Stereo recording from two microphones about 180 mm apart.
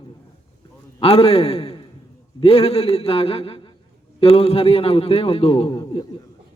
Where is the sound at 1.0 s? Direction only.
35° left (ahead or behind).